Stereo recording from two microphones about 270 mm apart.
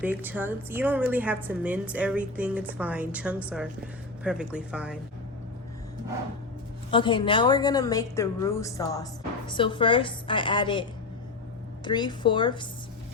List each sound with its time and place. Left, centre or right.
0.0 s a woman's voice: centre
6.9 s a woman's voice: centre
11.9 s a woman's voice: centre